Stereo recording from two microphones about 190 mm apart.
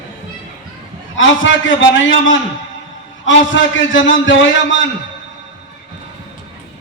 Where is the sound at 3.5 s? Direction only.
80° left.